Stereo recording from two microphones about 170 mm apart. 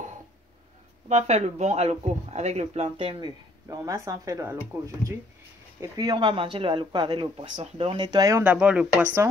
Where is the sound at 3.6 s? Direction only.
20° right (ahead or behind).